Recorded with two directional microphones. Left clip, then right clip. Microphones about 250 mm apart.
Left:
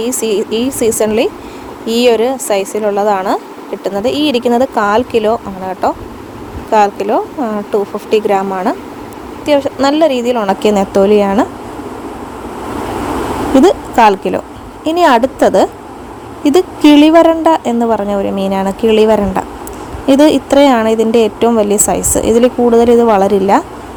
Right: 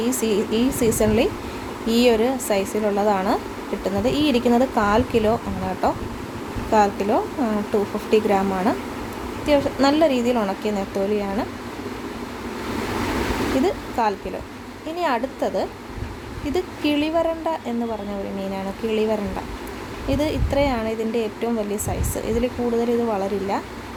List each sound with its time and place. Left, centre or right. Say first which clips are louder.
0.0 s speech: left 7 dB; left
13.6 s a woman's voice: left 17 dB; left